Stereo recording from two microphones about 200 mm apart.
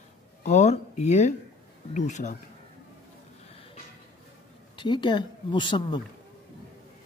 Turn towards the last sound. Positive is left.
turn(degrees=20)  # may be behind; listen again after turning